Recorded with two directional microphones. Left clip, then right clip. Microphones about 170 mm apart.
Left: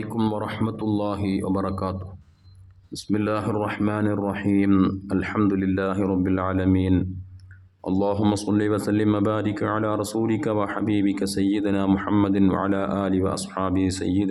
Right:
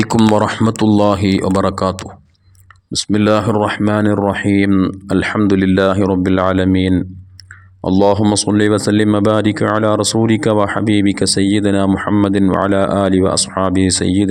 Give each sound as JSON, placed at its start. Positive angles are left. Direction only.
{"t": 0.3, "sound": "speech", "side_deg": -45}
{"t": 4.7, "sound": "speech", "side_deg": -25}
{"t": 5.0, "sound": "speech", "side_deg": -40}
{"t": 7.9, "sound": "speech", "side_deg": -40}